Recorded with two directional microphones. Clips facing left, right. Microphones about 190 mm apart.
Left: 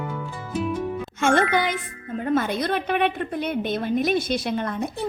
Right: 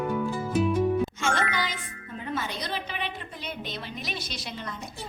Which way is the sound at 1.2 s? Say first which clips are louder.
Left 8 dB; 55° left (ahead or behind).